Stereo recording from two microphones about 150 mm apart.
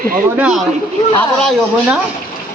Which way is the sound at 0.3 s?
5° right (ahead or behind).